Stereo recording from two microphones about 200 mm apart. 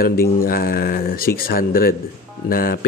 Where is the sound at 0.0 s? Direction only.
45° left (ahead or behind).